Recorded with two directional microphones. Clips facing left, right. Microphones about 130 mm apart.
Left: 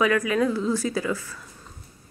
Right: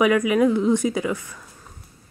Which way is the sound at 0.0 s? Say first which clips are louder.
Right 4 dB; 15° right (ahead or behind).